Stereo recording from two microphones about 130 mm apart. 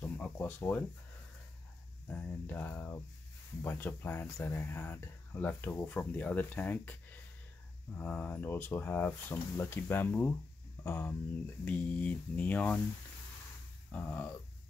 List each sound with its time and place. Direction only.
0.0 s a sound: 10° left (ahead or behind)
2.0 s speech: 15° left (ahead or behind)
13.9 s speech: 10° left (ahead or behind)